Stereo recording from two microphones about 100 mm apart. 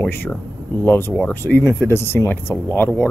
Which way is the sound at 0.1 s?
20° left (ahead or behind).